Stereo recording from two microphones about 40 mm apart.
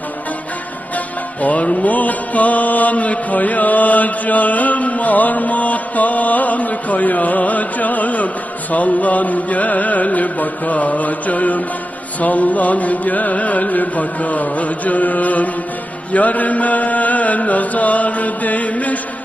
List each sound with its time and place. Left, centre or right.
0.9 s music: left